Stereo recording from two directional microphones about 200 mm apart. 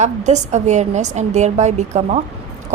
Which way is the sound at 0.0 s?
35° right (ahead or behind).